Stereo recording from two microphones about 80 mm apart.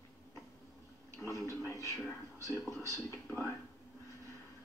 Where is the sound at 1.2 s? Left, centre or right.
Left.